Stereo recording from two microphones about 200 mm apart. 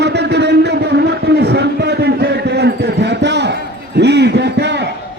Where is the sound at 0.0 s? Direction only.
55° right (ahead or behind).